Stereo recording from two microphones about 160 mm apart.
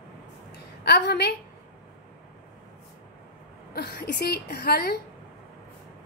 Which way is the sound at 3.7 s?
85° left.